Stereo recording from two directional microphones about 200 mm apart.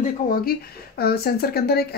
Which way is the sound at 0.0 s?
45° left (ahead or behind).